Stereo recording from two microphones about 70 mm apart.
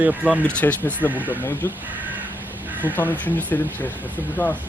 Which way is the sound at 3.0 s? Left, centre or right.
Left.